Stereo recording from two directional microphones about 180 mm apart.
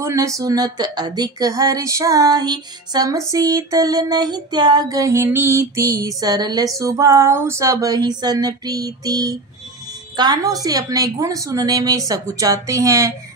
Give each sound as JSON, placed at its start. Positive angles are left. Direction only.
{"t": 0.0, "sound": "speech", "side_deg": -15}
{"t": 0.4, "sound": "female singing", "side_deg": -20}